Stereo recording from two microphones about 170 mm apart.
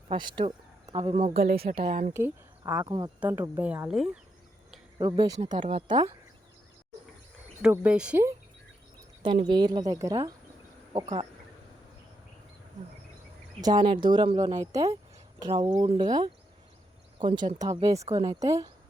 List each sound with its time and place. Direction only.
0.1 s speech: 25° right (ahead or behind)
1.5 s a woman's voice: 65° right (ahead or behind)
1.7 s a woman's voice: 35° right (ahead or behind)
2.1 s speech: 15° right (ahead or behind)
3.2 s speech: 10° right (ahead or behind)
4.9 s speech: 20° right (ahead or behind)
5.5 s a woman's voice: 35° right (ahead or behind)
7.6 s speech: 10° right (ahead or behind)
9.5 s speech: 25° right (ahead or behind)
13.6 s speech: 25° right (ahead or behind)